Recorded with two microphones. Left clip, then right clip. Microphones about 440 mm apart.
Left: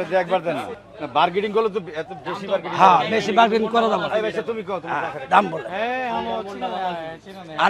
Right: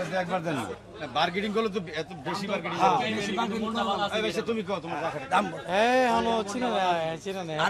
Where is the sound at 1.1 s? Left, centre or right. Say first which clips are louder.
Left 8 dB; left.